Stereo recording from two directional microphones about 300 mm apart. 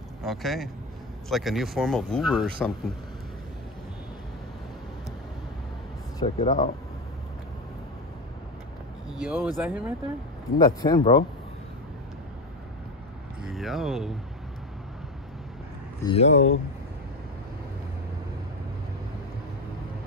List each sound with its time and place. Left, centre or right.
0.2 s speech: centre
6.1 s speech: centre
9.1 s speech: centre
10.6 s speech: centre
13.4 s speech: centre
16.1 s speech: left